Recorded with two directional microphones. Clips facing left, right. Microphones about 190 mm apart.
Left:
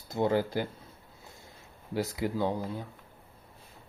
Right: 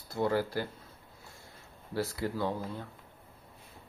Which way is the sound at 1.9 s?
15° left (ahead or behind).